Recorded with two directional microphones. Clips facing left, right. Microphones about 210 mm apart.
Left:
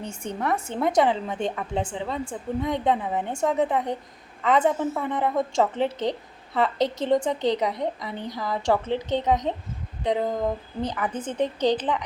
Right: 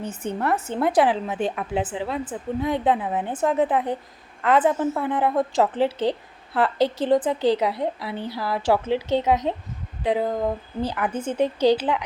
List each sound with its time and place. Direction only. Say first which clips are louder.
0.0 s a woman's voice: right 3 dB; 5° right (ahead or behind)